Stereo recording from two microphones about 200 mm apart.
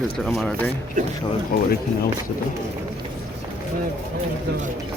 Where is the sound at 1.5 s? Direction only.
45° left (ahead or behind).